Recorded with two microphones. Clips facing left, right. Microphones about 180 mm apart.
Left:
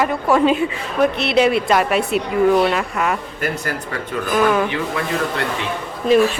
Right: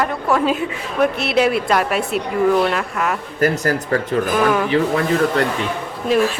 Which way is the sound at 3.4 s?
40° right (ahead or behind).